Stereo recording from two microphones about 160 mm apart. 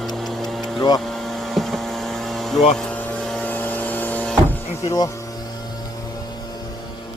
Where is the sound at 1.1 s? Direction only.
Centre (ahead or behind).